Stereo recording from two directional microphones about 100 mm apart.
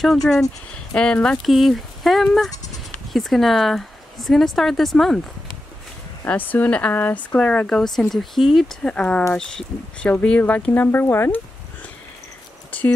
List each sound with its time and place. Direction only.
0.0 s speech: 5° left (ahead or behind)
6.2 s speech: 15° left (ahead or behind)